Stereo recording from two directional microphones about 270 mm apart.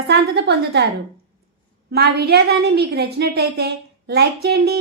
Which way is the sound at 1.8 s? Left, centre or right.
Right.